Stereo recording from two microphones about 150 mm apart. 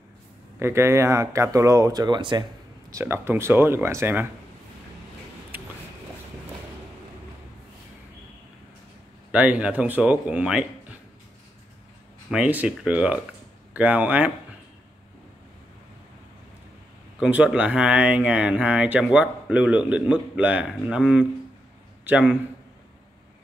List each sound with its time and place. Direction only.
0.6 s speech: 15° right (ahead or behind)
2.9 s speech: 15° right (ahead or behind)
9.3 s speech: 10° right (ahead or behind)
12.3 s speech: 10° right (ahead or behind)
17.2 s a man's voice: 10° right (ahead or behind)